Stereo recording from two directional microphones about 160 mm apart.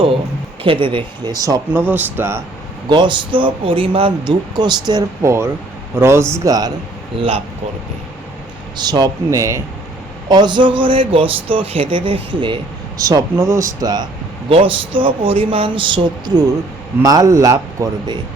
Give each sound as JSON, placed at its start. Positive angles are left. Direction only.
{"t": 0.6, "sound": "speech", "side_deg": -35}
{"t": 2.9, "sound": "a man's voice", "side_deg": -30}
{"t": 8.8, "sound": "speech", "side_deg": -25}
{"t": 13.0, "sound": "speech", "side_deg": -20}